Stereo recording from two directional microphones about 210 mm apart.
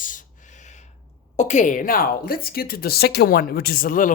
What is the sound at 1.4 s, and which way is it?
Speech, 35° left (ahead or behind).